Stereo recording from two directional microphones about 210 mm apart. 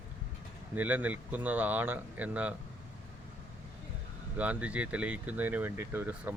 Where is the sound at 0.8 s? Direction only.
10° right (ahead or behind).